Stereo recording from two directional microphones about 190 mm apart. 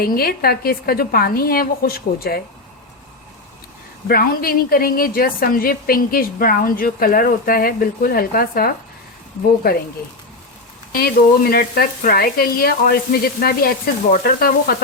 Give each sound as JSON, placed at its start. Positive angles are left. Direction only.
{"t": 0.0, "sound": "a woman's voice", "side_deg": 50}
{"t": 4.1, "sound": "a woman's voice", "side_deg": 50}
{"t": 10.9, "sound": "a woman's voice", "side_deg": 50}